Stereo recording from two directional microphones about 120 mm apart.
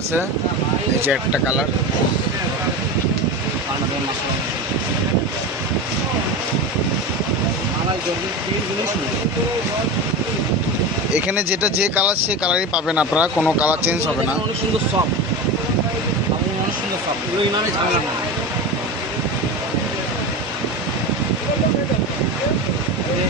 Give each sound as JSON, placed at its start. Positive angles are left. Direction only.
{"t": 1.1, "sound": "speech", "side_deg": -10}
{"t": 11.1, "sound": "speech", "side_deg": -10}